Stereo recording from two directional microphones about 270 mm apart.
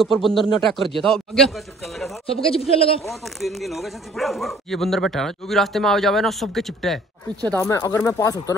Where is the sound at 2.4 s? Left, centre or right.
Left.